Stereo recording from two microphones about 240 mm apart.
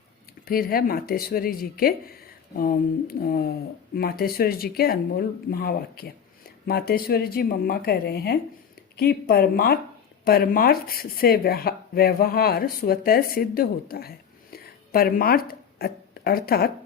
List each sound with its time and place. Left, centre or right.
0.4 s speech: left